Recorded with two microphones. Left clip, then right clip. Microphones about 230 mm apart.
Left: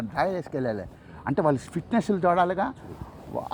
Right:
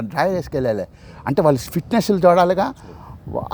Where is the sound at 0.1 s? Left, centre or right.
Right.